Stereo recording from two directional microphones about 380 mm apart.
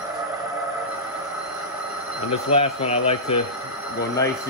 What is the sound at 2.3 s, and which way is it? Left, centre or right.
Speech, centre.